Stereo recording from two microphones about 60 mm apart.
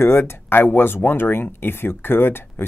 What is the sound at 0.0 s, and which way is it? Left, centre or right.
Speech, left.